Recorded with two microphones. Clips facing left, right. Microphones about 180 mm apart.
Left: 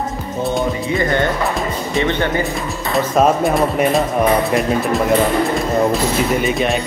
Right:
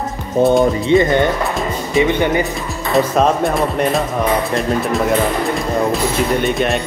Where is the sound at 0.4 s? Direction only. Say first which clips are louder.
Right 9 dB; 65° right (ahead or behind).